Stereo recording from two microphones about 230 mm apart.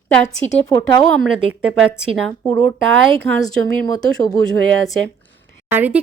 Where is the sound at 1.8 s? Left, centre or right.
Centre.